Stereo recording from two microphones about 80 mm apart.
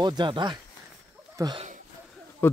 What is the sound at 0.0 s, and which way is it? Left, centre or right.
Speech, right.